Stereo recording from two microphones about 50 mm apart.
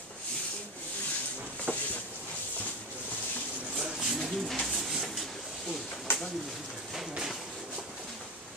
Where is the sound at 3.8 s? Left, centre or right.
Centre.